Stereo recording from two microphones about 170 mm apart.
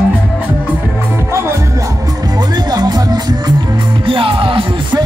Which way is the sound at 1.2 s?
15° right (ahead or behind).